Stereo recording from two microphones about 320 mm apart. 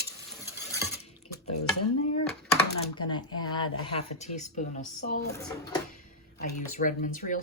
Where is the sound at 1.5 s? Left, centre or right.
Left.